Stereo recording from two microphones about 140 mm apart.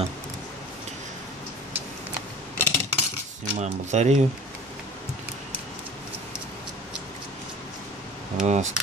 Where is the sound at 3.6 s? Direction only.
55° right (ahead or behind).